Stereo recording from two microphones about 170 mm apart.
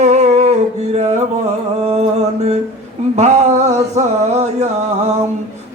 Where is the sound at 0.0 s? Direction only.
40° right (ahead or behind).